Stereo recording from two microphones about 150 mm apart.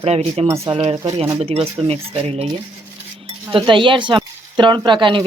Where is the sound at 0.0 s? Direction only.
45° right (ahead or behind).